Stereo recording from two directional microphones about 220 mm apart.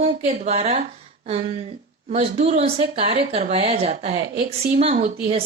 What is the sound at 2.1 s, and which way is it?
Speech, 30° right (ahead or behind).